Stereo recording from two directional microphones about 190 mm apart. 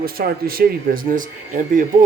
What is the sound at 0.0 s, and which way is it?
Speech, 50° right (ahead or behind).